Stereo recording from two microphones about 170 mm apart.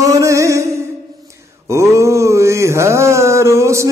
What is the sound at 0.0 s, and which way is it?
Music, 20° right (ahead or behind).